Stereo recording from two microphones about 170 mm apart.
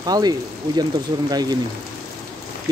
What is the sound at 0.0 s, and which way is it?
Speech, 25° right (ahead or behind).